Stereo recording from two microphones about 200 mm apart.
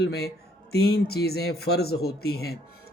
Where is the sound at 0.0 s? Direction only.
55° left (ahead or behind).